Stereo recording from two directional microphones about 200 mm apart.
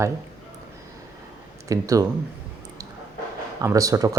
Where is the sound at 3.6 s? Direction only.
15° right (ahead or behind).